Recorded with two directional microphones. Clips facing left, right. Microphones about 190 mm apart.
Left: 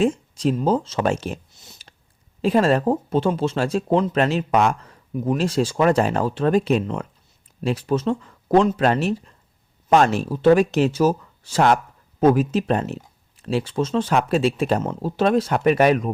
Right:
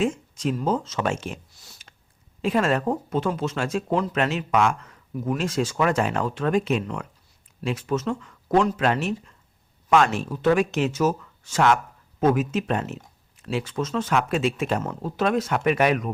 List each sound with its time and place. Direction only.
0.0 s a sound: 35° left (ahead or behind)
0.5 s speech: 30° left (ahead or behind)
1.5 s a sound: 20° left (ahead or behind)
2.4 s speech: 35° left (ahead or behind)
5.1 s speech: 20° left (ahead or behind)
5.4 s speech: 30° left (ahead or behind)